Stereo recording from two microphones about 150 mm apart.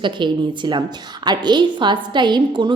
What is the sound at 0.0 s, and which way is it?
A woman's voice, 30° right (ahead or behind).